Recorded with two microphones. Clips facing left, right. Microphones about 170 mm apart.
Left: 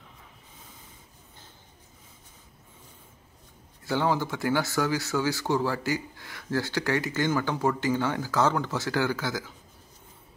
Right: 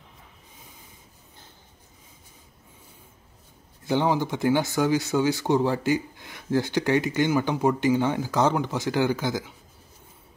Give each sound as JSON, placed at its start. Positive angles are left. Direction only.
{"t": 3.8, "sound": "speech", "side_deg": -20}